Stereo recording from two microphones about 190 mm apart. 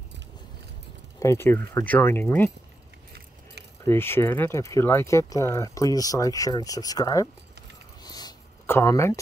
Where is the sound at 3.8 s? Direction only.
10° left (ahead or behind).